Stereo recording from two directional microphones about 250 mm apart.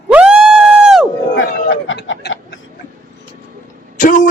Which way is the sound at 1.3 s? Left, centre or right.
Left.